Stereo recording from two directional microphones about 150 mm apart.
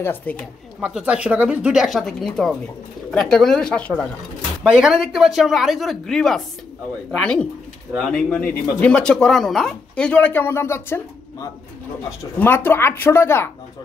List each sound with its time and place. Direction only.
0.0 s speech: 10° left (ahead or behind)
0.7 s speech: 5° right (ahead or behind); by 4.0 s 10° left (ahead or behind)
4.6 s speech: 5° right (ahead or behind)
8.7 s speech: 10° left (ahead or behind)